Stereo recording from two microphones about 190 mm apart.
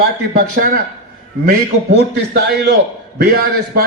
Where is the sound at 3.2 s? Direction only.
50° right (ahead or behind).